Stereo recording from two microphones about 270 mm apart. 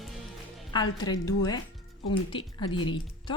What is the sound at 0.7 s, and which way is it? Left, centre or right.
A woman's voice, centre.